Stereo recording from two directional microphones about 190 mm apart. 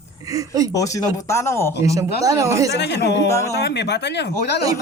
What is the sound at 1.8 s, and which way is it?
Speech, 15° right (ahead or behind).